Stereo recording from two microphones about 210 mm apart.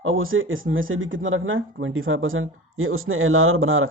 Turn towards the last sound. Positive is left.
turn(degrees=-70)  # may be behind; listen again after turning